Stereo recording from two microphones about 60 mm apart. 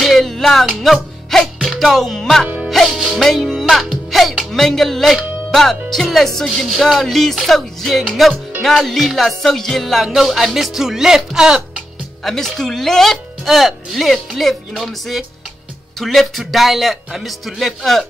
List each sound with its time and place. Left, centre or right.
0.0 s music: centre
2.4 s music: centre
2.7 s speech: centre
8.6 s music: centre
12.2 s music: centre